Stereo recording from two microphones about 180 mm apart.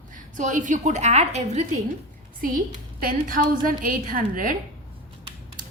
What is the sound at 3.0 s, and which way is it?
Speech, 50° right (ahead or behind).